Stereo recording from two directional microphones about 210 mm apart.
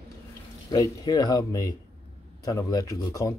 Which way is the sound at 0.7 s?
20° left (ahead or behind).